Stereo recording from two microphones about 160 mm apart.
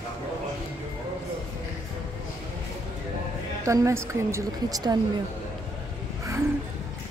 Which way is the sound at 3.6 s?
20° right (ahead or behind).